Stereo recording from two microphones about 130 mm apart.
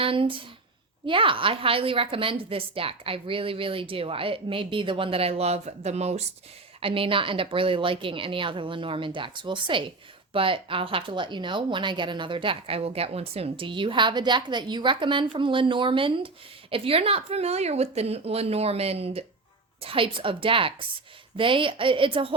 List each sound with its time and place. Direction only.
0.0 s a woman's voice: 45° right (ahead or behind)
6.7 s a woman's voice: 45° right (ahead or behind)